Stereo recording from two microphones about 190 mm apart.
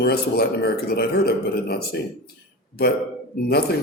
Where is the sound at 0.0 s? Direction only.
55° left (ahead or behind).